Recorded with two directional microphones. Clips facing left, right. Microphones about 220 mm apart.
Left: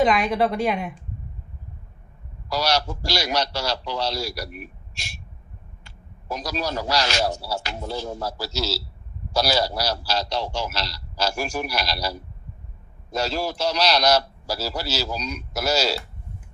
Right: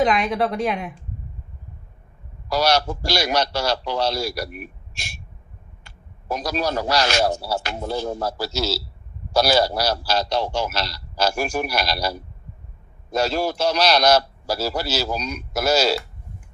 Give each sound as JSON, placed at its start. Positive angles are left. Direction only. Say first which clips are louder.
{"t": 0.0, "sound": "a woman's voice", "louder": "even", "side_deg": 0}
{"t": 2.5, "sound": "a man's voice", "louder": "right 4 dB", "side_deg": -55}